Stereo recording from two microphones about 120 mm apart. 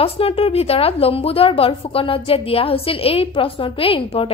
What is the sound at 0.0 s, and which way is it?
A woman's voice, 55° left (ahead or behind).